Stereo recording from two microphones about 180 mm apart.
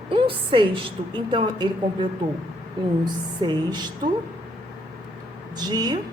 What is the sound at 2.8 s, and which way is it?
A woman's voice, 25° right (ahead or behind).